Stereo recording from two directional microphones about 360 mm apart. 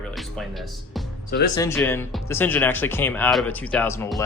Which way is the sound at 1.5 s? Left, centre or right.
Centre.